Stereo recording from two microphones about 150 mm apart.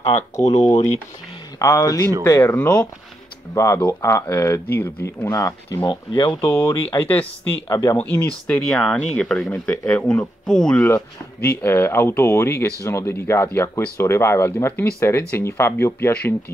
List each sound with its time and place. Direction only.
0.1 s speech: 50° left (ahead or behind)
1.6 s speech: 20° left (ahead or behind)
6.4 s speech: 15° left (ahead or behind)
8.0 s speech: 10° left (ahead or behind)
11.4 s speech: 15° left (ahead or behind)